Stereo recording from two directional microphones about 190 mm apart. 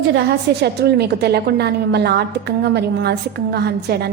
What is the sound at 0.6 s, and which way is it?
A woman's voice, 60° right (ahead or behind).